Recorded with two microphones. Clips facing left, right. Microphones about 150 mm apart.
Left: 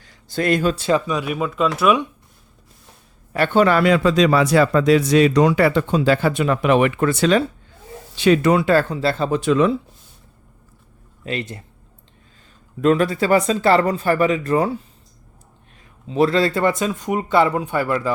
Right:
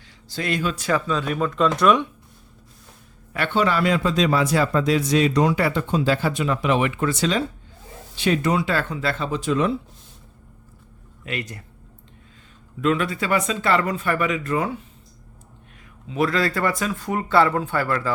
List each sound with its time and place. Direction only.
0.0 s a sound: 50° left (ahead or behind)
0.8 s speech: 25° left (ahead or behind)
1.0 s speech: 10° left (ahead or behind)
3.3 s a man's voice: 45° left (ahead or behind); by 7.4 s 60° left (ahead or behind)
8.2 s speech: 80° left; by 8.7 s 65° left (ahead or behind)
8.7 s speech: 35° left (ahead or behind)
9.3 s speech: 65° left (ahead or behind)
11.2 s speech: 30° left (ahead or behind)
12.8 s speech: 40° left (ahead or behind)
16.0 s speech: 30° left (ahead or behind)